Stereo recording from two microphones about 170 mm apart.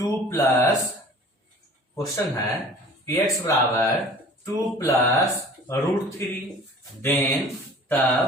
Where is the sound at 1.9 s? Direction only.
20° left (ahead or behind).